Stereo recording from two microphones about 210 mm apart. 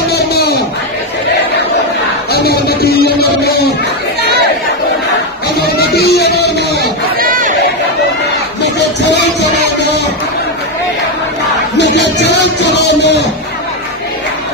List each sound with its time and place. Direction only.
0.1 s a sound: 50° left (ahead or behind)
2.3 s music: 50° left (ahead or behind)
4.2 s chatter: 50° right (ahead or behind)
5.6 s music: 50° left (ahead or behind)
6.8 s crowd: 40° right (ahead or behind)
11.7 s music: 55° left (ahead or behind)